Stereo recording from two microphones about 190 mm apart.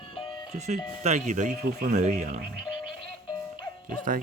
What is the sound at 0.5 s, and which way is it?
Speech, 35° right (ahead or behind).